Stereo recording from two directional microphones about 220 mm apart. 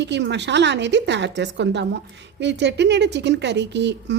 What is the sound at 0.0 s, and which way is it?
Speech, 55° right (ahead or behind).